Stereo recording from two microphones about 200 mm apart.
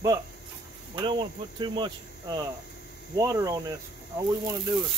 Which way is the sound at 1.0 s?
25° right (ahead or behind).